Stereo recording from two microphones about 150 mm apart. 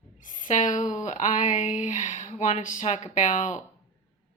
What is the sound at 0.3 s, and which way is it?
Speech, 60° left (ahead or behind).